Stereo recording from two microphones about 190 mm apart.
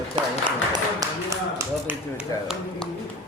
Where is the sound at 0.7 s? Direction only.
20° right (ahead or behind).